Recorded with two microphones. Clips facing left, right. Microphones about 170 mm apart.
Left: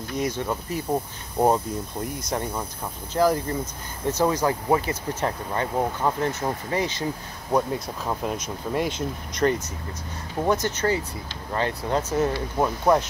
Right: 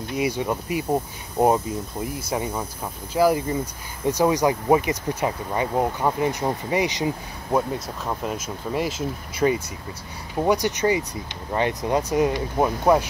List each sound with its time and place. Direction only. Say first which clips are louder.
0.1 s speech: right 2 dB; 10° right (ahead or behind)
7.5 s speech: even; centre (ahead or behind)